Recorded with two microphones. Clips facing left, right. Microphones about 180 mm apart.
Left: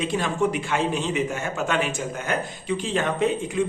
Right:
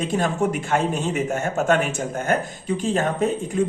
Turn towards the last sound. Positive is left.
turn(degrees=-45)  # may be behind; listen again after turning